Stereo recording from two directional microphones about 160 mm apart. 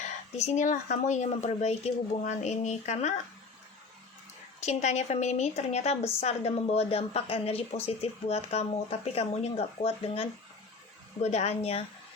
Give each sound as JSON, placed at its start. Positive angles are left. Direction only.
{"t": 0.0, "sound": "speech", "side_deg": 45}
{"t": 4.6, "sound": "speech", "side_deg": 45}